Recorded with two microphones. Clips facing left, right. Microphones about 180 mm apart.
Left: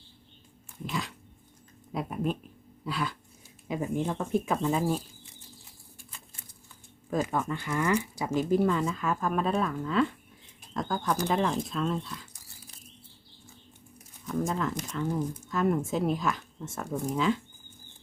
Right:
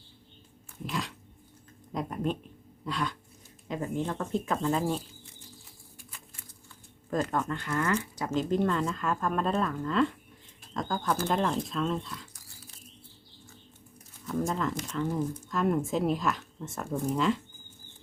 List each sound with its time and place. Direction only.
0.9 s dog: centre (ahead or behind)
1.9 s speech: 5° left (ahead or behind)
7.1 s speech: 5° left (ahead or behind)
14.3 s speech: centre (ahead or behind)